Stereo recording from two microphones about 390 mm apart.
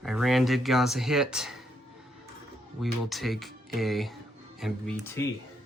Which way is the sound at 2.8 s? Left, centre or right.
Centre.